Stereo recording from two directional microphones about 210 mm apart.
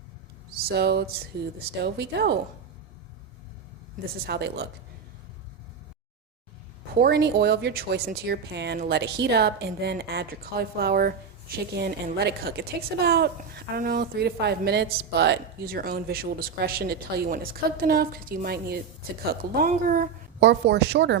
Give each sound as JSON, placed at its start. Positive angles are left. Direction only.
{"t": 0.5, "sound": "a woman's voice", "side_deg": -50}
{"t": 4.0, "sound": "a woman's voice", "side_deg": -50}
{"t": 7.0, "sound": "a woman's voice", "side_deg": -50}